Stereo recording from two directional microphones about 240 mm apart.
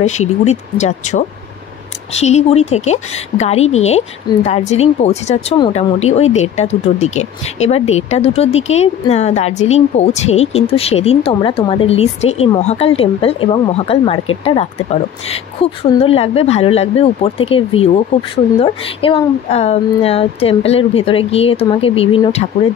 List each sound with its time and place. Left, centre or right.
0.0 s speech: left